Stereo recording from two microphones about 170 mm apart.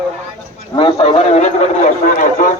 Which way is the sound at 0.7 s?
30° left (ahead or behind).